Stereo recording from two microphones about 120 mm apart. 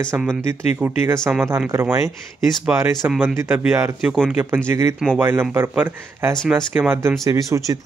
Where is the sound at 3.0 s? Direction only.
15° right (ahead or behind).